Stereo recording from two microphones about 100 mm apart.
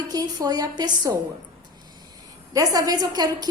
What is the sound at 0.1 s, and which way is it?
A woman's voice, 40° right (ahead or behind).